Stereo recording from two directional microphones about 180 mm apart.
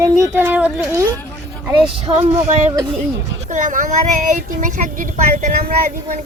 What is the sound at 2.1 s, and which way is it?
Speech, 20° right (ahead or behind).